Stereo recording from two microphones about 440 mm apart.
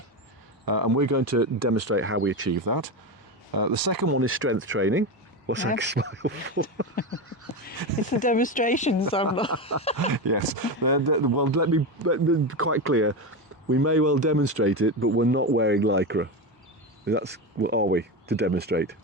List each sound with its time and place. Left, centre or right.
0.6 s speech: right
2.6 s speech: right
4.1 s speech: right
7.0 s a sound: centre
8.2 s speech: centre
10.1 s speech: right